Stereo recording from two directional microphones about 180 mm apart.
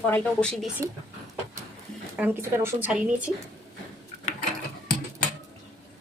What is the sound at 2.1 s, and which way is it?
A woman's voice, 10° right (ahead or behind).